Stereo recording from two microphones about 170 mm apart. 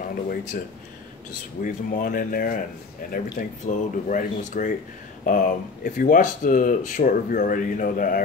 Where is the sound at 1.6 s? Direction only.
50° left (ahead or behind).